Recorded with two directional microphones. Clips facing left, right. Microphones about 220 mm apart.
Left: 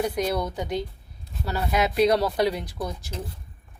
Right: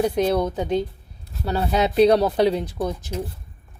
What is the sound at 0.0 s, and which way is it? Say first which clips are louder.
Speech: right 5 dB; 25° right (ahead or behind).